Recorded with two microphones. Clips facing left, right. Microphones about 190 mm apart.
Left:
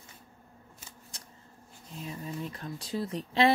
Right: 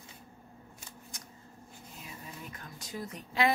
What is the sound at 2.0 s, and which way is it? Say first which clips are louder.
Speech: left 10 dB; 30° left (ahead or behind).